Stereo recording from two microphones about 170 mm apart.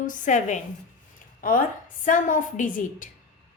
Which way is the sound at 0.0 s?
50° left (ahead or behind).